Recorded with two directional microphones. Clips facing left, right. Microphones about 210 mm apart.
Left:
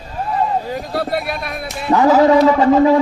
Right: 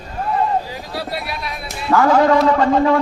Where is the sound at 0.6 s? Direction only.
50° left (ahead or behind).